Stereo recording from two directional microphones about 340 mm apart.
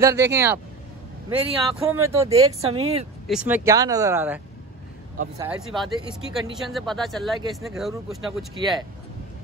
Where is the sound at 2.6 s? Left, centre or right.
Right.